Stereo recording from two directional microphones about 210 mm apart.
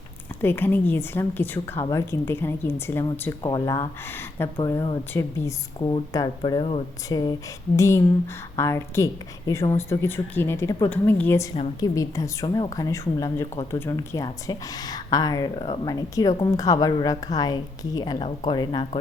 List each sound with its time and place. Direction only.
0.4 s a woman's voice: 10° left (ahead or behind)